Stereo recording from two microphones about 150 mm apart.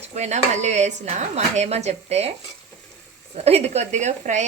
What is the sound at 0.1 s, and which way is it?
Speech, 50° right (ahead or behind).